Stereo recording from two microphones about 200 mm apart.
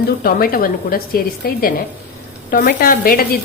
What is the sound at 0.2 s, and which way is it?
Speech, 50° left (ahead or behind).